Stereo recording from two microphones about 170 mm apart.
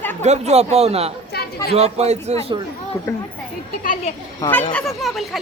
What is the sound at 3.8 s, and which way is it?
Speech, 50° left (ahead or behind).